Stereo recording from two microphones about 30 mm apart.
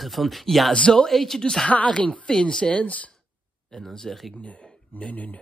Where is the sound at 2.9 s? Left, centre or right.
Left.